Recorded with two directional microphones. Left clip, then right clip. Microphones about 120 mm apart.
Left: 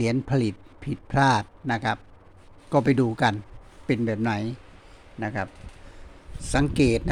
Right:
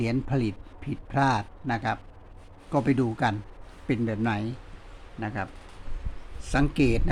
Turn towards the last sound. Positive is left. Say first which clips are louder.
# left 3 dB
turn(degrees=45)  # may be behind; listen again after turning